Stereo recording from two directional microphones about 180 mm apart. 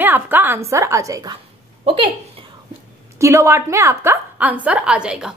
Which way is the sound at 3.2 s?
15° right (ahead or behind).